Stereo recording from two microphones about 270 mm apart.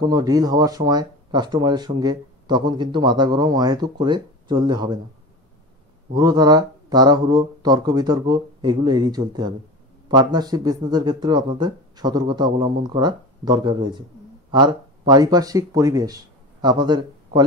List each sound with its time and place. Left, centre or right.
0.0 s speech: centre
6.1 s a man's voice: centre